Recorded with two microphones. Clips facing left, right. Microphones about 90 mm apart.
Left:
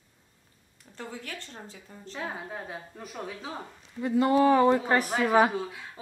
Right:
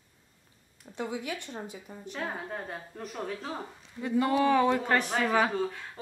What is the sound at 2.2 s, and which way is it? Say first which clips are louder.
A woman's voice: even; centre (ahead or behind).